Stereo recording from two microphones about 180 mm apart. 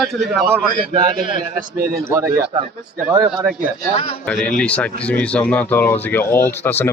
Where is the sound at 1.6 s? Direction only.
55° right (ahead or behind).